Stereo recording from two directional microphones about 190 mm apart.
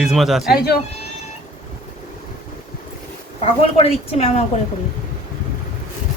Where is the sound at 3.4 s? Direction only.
30° left (ahead or behind).